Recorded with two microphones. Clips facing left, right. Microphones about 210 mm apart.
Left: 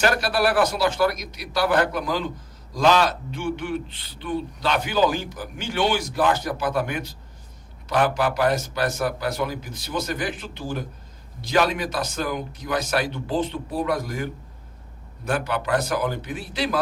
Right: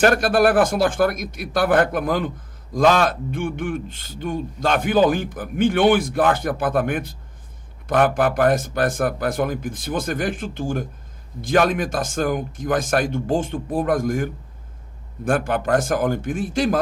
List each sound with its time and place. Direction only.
0.0 s speech: 50° right (ahead or behind)